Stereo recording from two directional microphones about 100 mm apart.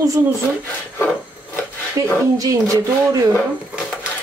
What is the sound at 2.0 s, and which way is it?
Speech, 30° right (ahead or behind).